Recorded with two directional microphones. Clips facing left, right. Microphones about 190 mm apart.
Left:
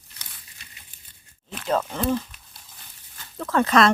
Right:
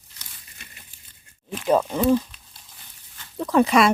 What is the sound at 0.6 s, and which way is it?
Crumpling, 55° right (ahead or behind).